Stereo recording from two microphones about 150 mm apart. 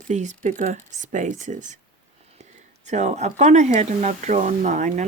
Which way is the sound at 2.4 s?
50° right (ahead or behind).